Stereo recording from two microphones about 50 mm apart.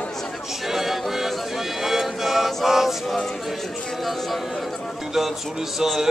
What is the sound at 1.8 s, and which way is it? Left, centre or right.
Music, centre.